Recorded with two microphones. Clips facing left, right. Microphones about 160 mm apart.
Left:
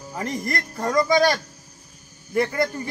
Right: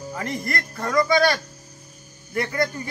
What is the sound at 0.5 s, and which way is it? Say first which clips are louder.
Speech: left 2 dB; 20° left (ahead or behind).